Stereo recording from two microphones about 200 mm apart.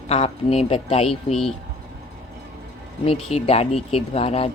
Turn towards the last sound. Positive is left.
turn(degrees=30)  # may be behind; listen again after turning